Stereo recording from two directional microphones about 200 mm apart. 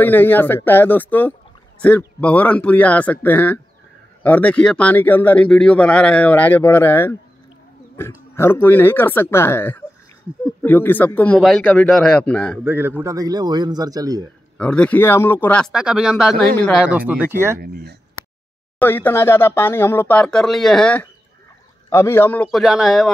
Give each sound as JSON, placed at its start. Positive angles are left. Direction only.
{"t": 0.0, "sound": "a man's voice", "side_deg": 10}
{"t": 12.6, "sound": "a man's voice", "side_deg": -10}
{"t": 14.6, "sound": "speech", "side_deg": 5}
{"t": 16.8, "sound": "a man's voice", "side_deg": -5}
{"t": 17.6, "sound": "speech", "side_deg": -55}
{"t": 18.8, "sound": "a man's voice", "side_deg": 10}